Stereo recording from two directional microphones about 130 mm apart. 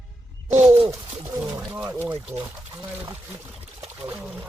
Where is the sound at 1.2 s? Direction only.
15° right (ahead or behind).